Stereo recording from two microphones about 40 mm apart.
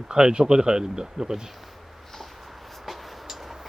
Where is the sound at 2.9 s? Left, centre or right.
Centre.